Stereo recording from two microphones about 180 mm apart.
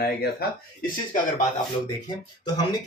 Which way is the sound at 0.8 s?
45° left (ahead or behind).